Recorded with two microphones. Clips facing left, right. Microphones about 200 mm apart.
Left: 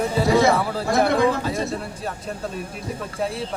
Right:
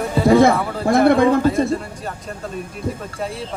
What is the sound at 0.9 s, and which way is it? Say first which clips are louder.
Speech: right 6 dB; 55° right (ahead or behind).